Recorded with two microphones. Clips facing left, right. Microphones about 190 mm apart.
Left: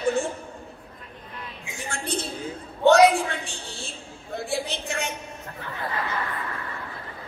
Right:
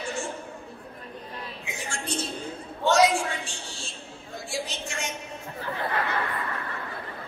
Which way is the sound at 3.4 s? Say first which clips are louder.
Left 3 dB; 60° left (ahead or behind).